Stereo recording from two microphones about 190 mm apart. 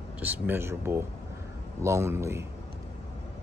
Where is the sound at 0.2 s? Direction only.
10° right (ahead or behind).